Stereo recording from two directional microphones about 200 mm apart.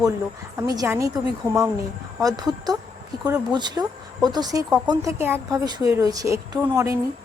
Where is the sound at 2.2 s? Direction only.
20° right (ahead or behind).